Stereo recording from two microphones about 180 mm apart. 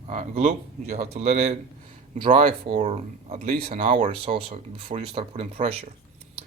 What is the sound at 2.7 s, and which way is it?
Speech, 30° right (ahead or behind).